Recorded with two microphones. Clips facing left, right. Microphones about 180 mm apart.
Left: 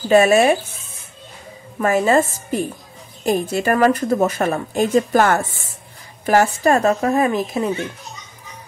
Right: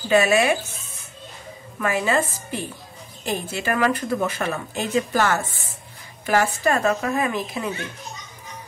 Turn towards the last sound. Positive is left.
turn(degrees=45)  # may be behind; listen again after turning